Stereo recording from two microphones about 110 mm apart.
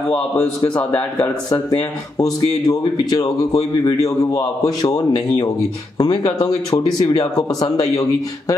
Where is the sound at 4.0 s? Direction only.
30° left (ahead or behind).